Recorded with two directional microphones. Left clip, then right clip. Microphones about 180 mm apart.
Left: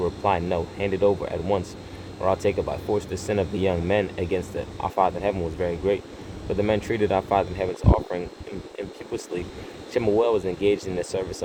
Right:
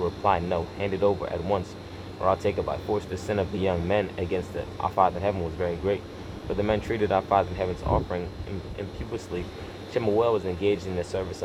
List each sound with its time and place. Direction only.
0.0 s speech: 55° left (ahead or behind)
9.9 s speech: 55° left (ahead or behind)